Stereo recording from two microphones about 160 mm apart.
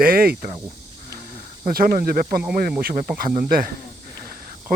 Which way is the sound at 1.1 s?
60° right (ahead or behind).